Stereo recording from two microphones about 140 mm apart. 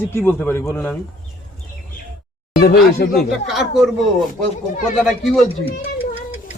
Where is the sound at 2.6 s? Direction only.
90° left.